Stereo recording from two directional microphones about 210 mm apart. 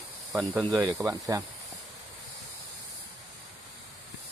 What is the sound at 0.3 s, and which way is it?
Speech, 10° right (ahead or behind).